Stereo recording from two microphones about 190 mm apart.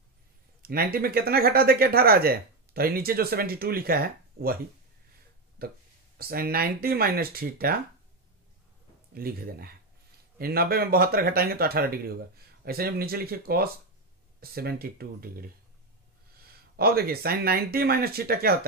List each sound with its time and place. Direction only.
0.6 s speech: 50° right (ahead or behind)
5.6 s speech: 50° right (ahead or behind)
9.1 s speech: 50° right (ahead or behind)
16.7 s speech: 55° right (ahead or behind)